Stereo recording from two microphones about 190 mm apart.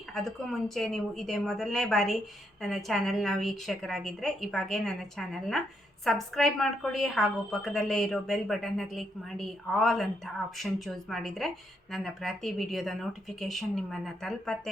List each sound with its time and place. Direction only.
0.1 s speech: centre (ahead or behind)